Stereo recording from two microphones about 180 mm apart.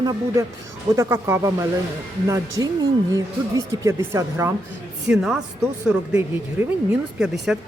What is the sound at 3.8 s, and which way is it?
Speech, 15° right (ahead or behind).